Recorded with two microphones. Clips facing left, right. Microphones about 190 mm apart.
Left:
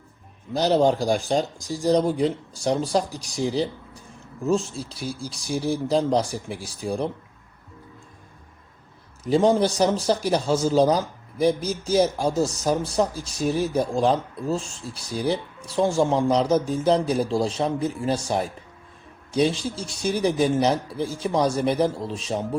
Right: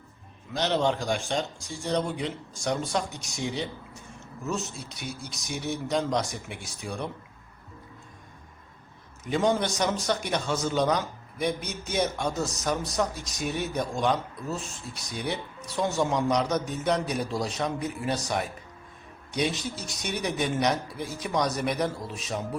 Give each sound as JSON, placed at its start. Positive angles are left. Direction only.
{"t": 0.5, "sound": "a man's voice", "side_deg": 35}
{"t": 9.2, "sound": "a man's voice", "side_deg": 35}